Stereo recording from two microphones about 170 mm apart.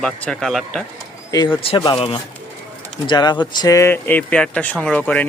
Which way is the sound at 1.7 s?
30° left (ahead or behind).